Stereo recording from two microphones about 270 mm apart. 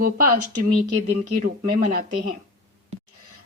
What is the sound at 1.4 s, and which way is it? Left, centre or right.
Speech, right.